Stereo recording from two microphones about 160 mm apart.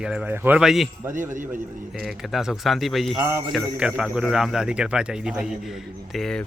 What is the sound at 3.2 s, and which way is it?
Speech, 15° right (ahead or behind).